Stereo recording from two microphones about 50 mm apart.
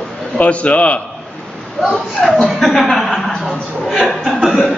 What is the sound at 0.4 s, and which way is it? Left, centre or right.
Speech, left.